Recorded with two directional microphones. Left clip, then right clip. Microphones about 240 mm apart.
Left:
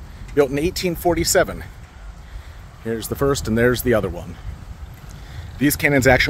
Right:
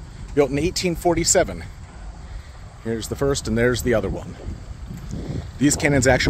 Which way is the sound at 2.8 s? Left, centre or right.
Centre.